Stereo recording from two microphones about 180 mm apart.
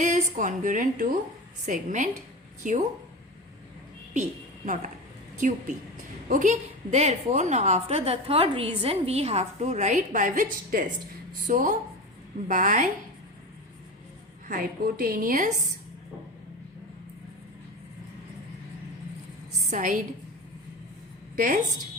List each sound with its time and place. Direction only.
0.0 s a woman's voice: 45° right (ahead or behind)
4.1 s a woman's voice: 45° right (ahead or behind)
14.4 s a woman's voice: 50° right (ahead or behind)
19.7 s a woman's voice: 45° right (ahead or behind)
21.3 s a woman's voice: 50° right (ahead or behind)